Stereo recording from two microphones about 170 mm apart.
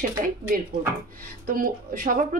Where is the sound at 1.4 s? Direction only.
55° right (ahead or behind).